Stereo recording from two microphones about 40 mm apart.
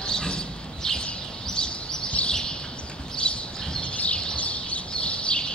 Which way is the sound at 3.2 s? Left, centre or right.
Left.